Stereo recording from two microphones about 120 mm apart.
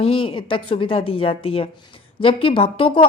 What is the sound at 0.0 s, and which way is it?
Speech, 50° left (ahead or behind).